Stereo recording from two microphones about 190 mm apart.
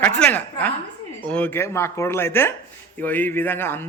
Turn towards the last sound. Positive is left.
turn(degrees=10)  # may be behind; listen again after turning